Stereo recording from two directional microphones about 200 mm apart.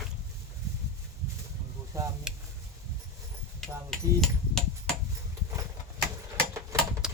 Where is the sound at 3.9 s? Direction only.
Centre (ahead or behind).